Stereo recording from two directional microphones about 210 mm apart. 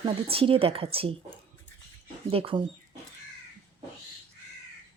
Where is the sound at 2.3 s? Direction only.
25° right (ahead or behind).